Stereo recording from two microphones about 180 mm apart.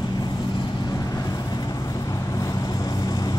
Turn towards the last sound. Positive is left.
turn(degrees=20)  # may be behind; listen again after turning